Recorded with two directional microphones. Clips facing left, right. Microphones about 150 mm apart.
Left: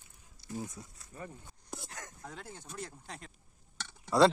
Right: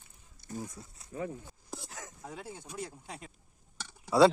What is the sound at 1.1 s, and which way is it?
Speech, 90° right.